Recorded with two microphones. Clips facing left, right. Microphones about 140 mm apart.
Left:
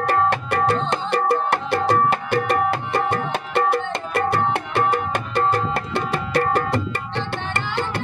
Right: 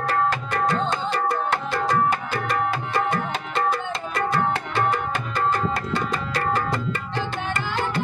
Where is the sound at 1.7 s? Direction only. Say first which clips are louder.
Left 4 dB; 65° left (ahead or behind).